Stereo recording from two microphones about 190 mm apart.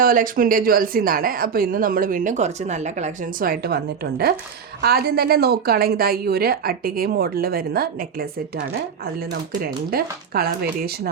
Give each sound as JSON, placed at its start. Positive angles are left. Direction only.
{"t": 0.0, "sound": "speech", "side_deg": -45}
{"t": 9.9, "sound": "speech", "side_deg": -55}